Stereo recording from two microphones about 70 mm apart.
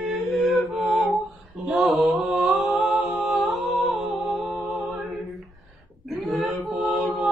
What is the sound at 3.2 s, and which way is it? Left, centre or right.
Humming, centre.